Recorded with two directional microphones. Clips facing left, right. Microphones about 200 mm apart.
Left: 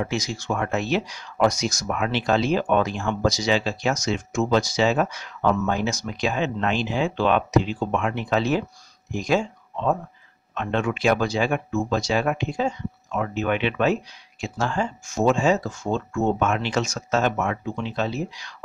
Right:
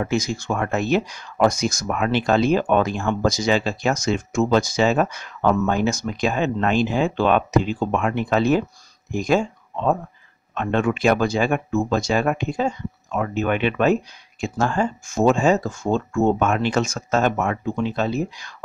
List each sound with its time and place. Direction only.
0.0 s speech: 50° right (ahead or behind)